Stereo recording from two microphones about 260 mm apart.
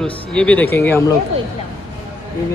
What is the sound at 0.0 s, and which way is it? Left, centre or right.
A man's voice, centre.